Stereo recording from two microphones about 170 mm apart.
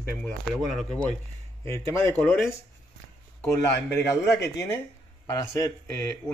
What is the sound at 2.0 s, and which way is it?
Speech, 15° left (ahead or behind).